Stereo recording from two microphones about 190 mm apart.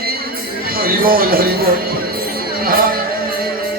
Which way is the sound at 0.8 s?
50° right (ahead or behind).